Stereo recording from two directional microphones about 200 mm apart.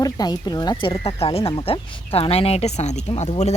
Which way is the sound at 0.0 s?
20° left (ahead or behind).